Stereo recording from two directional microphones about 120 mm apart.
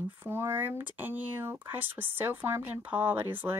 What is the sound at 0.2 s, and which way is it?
Speech, 20° right (ahead or behind).